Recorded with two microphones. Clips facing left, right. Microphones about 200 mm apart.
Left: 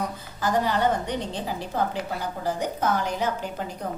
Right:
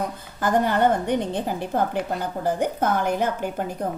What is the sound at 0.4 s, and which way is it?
A woman's voice, 55° right (ahead or behind).